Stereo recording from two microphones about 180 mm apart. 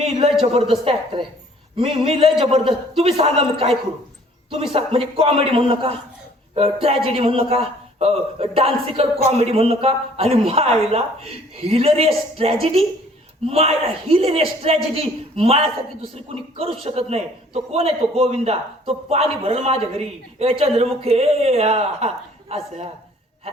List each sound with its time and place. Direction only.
0.5 s a man's voice: 35° right (ahead or behind)